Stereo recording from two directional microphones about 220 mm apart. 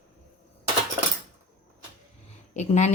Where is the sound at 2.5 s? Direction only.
30° left (ahead or behind).